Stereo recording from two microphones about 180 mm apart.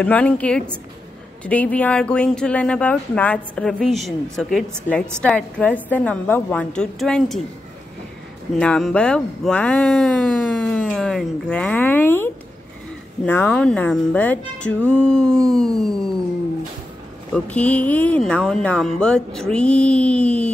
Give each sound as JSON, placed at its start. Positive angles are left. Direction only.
{"t": 0.0, "sound": "speech", "side_deg": 5}
{"t": 8.5, "sound": "speech", "side_deg": 5}
{"t": 17.3, "sound": "speech", "side_deg": 10}